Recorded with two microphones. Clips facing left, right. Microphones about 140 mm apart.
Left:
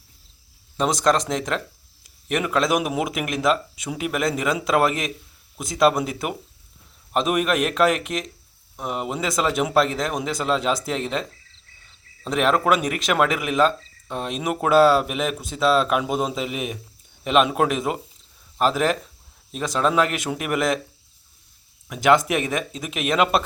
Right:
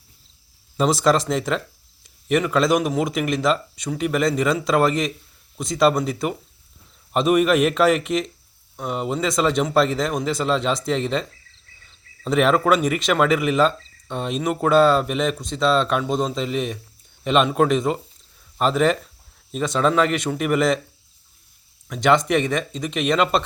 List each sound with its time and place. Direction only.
0.8 s speech: centre (ahead or behind)
21.8 s speech: 5° left (ahead or behind)